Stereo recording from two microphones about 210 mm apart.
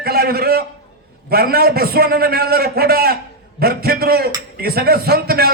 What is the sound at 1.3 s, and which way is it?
A man's voice, 45° right (ahead or behind).